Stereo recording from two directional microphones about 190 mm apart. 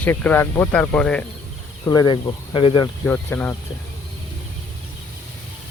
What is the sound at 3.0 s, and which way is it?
Speech, 10° left (ahead or behind).